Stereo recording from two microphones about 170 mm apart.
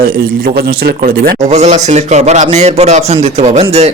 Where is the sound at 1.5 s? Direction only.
45° right (ahead or behind).